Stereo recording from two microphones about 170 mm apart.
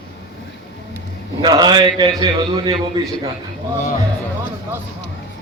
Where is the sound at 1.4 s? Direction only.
25° right (ahead or behind).